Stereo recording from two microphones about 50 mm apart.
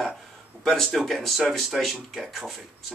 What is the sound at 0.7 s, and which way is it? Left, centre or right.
Speech, centre.